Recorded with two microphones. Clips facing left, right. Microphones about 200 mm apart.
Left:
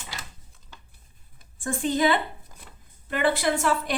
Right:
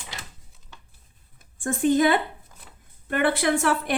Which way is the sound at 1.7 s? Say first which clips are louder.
Right 3 dB; 50° right (ahead or behind).